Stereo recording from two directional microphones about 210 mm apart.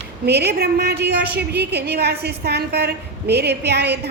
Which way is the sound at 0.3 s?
50° right (ahead or behind).